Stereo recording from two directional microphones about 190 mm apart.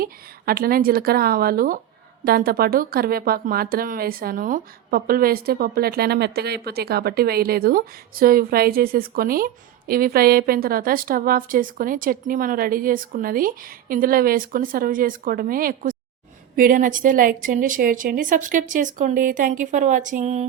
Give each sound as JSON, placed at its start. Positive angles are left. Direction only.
{"t": 0.0, "sound": "a woman's voice", "side_deg": -50}